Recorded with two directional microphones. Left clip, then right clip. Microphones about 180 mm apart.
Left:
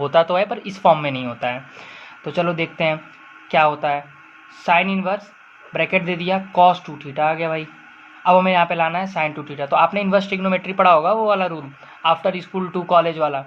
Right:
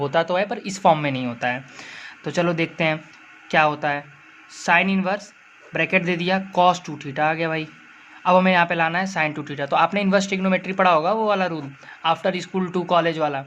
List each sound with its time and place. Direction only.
0.0 s speech: 15° right (ahead or behind)